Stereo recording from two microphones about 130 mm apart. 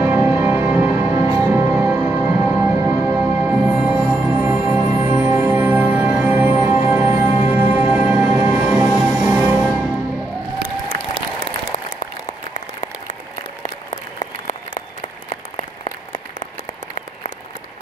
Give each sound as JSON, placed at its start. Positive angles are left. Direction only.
{"t": 0.0, "sound": "music", "side_deg": -15}
{"t": 4.0, "sound": "music", "side_deg": 0}
{"t": 4.3, "sound": "music", "side_deg": -10}
{"t": 10.6, "sound": "applause", "side_deg": -90}
{"t": 12.5, "sound": "applause", "side_deg": 70}